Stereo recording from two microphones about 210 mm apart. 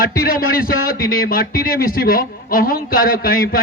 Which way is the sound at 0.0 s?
45° left (ahead or behind).